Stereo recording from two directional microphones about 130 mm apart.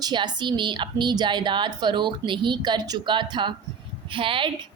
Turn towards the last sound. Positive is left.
turn(degrees=-40)  # may be behind; listen again after turning